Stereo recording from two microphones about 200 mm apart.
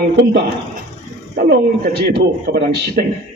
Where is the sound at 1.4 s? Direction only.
50° right (ahead or behind).